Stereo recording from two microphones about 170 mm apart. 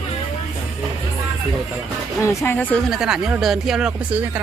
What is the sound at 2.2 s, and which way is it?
Speech, 15° left (ahead or behind).